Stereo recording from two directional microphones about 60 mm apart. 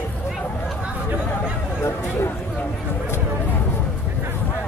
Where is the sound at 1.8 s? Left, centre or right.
Left.